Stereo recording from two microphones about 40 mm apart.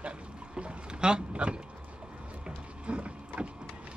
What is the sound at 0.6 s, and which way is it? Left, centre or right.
Boat, right.